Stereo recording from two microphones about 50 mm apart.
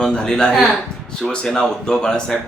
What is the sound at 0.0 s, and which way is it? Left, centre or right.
Speech, centre.